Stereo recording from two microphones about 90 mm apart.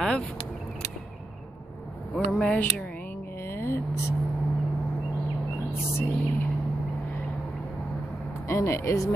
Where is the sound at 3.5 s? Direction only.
30° left (ahead or behind).